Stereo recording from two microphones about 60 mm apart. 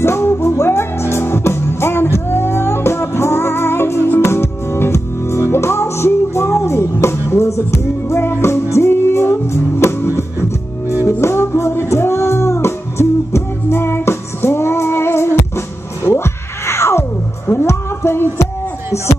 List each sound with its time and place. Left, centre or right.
0.0 s music: left